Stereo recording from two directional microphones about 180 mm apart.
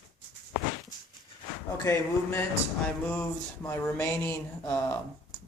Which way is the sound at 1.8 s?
15° left (ahead or behind).